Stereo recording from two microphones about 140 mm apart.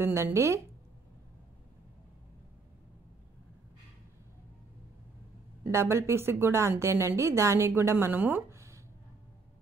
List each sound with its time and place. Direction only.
0.0 s a woman's voice: 20° right (ahead or behind)
5.6 s a woman's voice: 20° right (ahead or behind)